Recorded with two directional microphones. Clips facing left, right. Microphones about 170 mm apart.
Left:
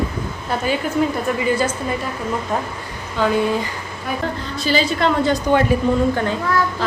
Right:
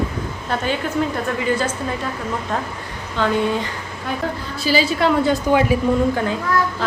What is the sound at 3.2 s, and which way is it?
Speech, 10° left (ahead or behind).